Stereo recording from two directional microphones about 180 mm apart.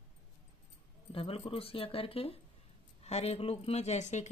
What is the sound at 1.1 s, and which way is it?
Speech, 30° left (ahead or behind).